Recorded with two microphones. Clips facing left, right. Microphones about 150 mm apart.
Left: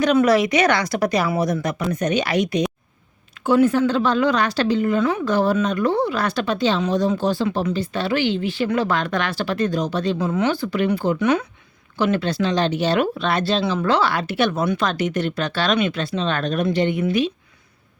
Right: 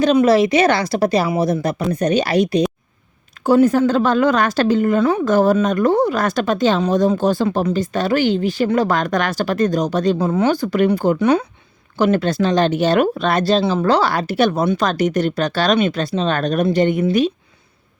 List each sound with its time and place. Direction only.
0.0 s a woman's voice: 30° right (ahead or behind)